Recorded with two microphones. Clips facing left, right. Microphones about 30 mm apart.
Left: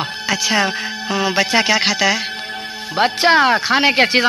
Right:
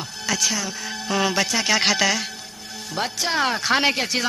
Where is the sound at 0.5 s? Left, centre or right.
Left.